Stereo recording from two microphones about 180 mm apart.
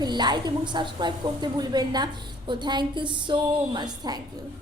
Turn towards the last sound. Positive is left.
turn(degrees=-25)  # may be behind; listen again after turning